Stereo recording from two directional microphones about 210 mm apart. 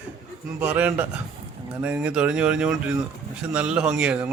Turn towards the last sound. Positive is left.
turn(degrees=-5)  # may be behind; listen again after turning